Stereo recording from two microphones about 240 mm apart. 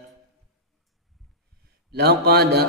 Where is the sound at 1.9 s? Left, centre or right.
Right.